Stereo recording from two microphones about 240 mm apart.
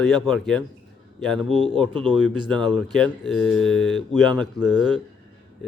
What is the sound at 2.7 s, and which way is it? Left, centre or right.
Speech, centre.